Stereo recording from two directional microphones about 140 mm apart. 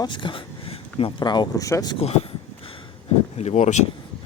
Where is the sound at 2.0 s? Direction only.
45° left (ahead or behind).